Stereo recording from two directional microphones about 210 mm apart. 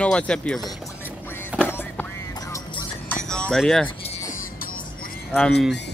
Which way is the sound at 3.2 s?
5° left (ahead or behind).